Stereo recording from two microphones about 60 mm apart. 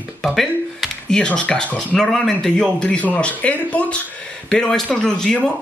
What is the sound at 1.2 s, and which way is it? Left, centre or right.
A man's voice, centre.